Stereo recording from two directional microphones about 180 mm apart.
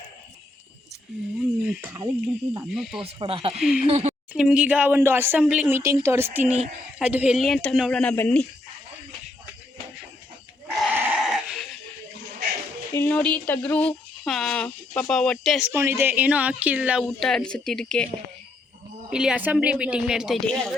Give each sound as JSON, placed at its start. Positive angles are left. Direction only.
{"t": 1.4, "sound": "a sound", "side_deg": -5}
{"t": 1.9, "sound": "speech", "side_deg": -20}
{"t": 2.7, "sound": "a woman's voice", "side_deg": 0}
{"t": 3.0, "sound": "speech", "side_deg": -30}
{"t": 3.6, "sound": "a woman's voice", "side_deg": -5}
{"t": 3.8, "sound": "speech", "side_deg": -35}
{"t": 4.4, "sound": "a woman's voice", "side_deg": -5}
{"t": 10.8, "sound": "a sound", "side_deg": -10}
{"t": 12.9, "sound": "speech", "side_deg": 10}
{"t": 15.7, "sound": "a woman's voice", "side_deg": -15}
{"t": 19.1, "sound": "a woman's voice", "side_deg": -5}